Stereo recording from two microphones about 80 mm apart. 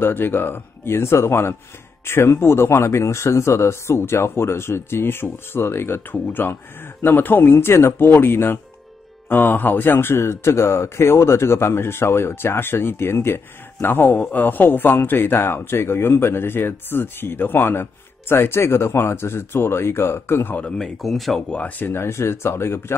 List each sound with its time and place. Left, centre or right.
0.0 s speech: left
20.5 s speech: centre
21.5 s speech: centre
21.8 s speech: left